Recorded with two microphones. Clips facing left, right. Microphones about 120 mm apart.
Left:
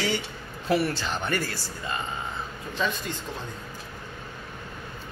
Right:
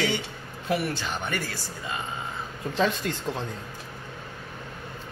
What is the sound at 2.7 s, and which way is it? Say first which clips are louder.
Speech: right 4 dB; 90° right.